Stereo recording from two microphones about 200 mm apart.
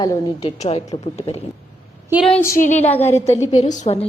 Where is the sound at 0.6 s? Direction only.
30° left (ahead or behind).